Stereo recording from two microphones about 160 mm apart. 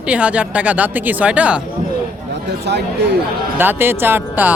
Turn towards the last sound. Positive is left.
turn(degrees=-10)  # may be behind; listen again after turning